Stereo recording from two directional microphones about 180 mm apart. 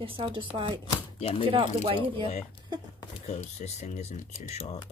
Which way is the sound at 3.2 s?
40° left (ahead or behind).